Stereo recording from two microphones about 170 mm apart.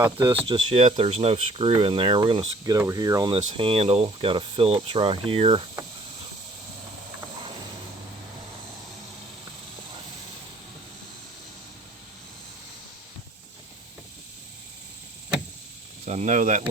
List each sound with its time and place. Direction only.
0.0 s speech: 25° right (ahead or behind)
2.7 s speech: 20° right (ahead or behind)
3.3 s speech: 35° right (ahead or behind)
16.0 s speech: 45° right (ahead or behind)